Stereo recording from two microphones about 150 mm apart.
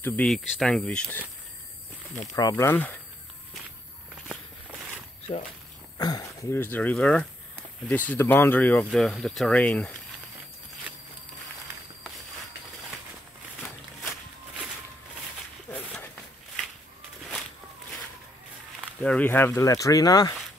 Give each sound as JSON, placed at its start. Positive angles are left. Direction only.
{"t": 0.0, "sound": "speech", "side_deg": 10}
{"t": 2.3, "sound": "speech", "side_deg": 20}
{"t": 4.3, "sound": "walk", "side_deg": -10}
{"t": 5.9, "sound": "speech", "side_deg": 25}
{"t": 6.5, "sound": "speech", "side_deg": 15}
{"t": 18.9, "sound": "speech", "side_deg": 10}